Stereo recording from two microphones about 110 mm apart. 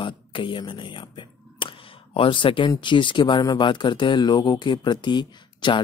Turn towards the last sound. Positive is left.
turn(degrees=45)  # may be behind; listen again after turning